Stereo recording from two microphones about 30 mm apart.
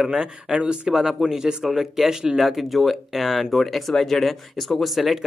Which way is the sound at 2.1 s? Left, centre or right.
Right.